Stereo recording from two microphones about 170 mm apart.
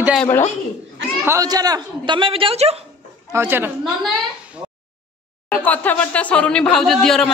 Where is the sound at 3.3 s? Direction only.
15° right (ahead or behind).